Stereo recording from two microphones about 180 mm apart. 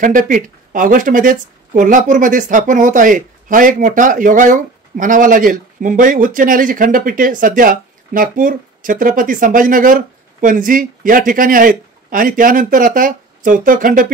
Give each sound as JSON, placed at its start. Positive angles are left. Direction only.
{"t": 0.0, "sound": "speech", "side_deg": -50}